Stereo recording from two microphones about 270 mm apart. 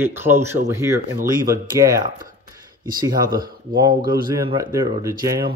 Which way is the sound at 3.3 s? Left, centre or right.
Right.